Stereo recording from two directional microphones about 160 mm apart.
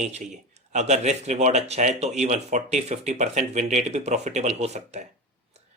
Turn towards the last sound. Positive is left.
turn(degrees=-45)  # may be behind; listen again after turning